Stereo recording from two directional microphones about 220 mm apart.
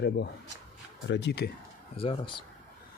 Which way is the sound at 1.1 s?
50° left (ahead or behind).